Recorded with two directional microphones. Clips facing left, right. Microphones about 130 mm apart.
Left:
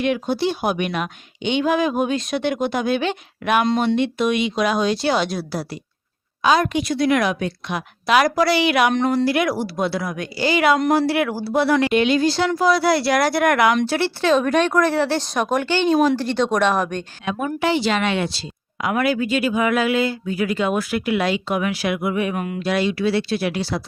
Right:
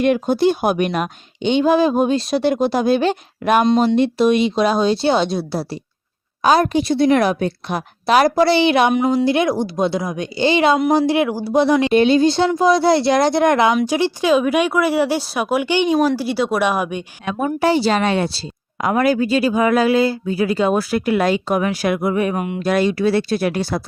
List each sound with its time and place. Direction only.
0.0 s speech: 45° right (ahead or behind)
3.6 s speech: 20° right (ahead or behind)
3.8 s speech: 35° right (ahead or behind)
6.4 s speech: 40° right (ahead or behind)
8.9 s speech: 5° right (ahead or behind)
9.2 s speech: 25° right (ahead or behind)
11.9 s speech: 30° right (ahead or behind); by 17.1 s 10° right (ahead or behind)
17.2 s speech: 35° right (ahead or behind)
22.4 s speech: 25° right (ahead or behind)
22.6 s speech: 45° right (ahead or behind)